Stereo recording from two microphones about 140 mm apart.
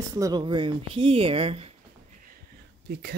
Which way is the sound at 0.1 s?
25° right (ahead or behind).